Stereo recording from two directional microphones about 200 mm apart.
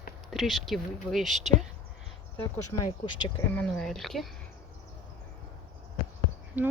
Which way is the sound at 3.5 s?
Centre (ahead or behind).